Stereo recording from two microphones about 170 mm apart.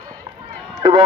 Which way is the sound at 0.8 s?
30° right (ahead or behind).